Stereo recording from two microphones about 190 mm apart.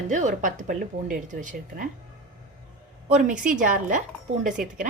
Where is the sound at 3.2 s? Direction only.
40° right (ahead or behind).